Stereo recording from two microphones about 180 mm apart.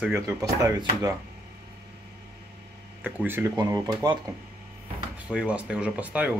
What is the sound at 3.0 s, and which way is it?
Speech, 10° right (ahead or behind).